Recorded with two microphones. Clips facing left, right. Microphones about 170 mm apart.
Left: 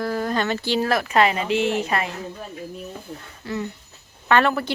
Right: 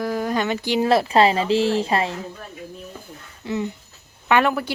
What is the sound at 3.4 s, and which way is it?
Speech, 20° right (ahead or behind).